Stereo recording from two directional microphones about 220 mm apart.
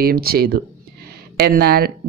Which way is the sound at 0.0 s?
45° right (ahead or behind).